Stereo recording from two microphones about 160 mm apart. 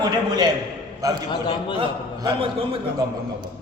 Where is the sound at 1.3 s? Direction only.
30° left (ahead or behind).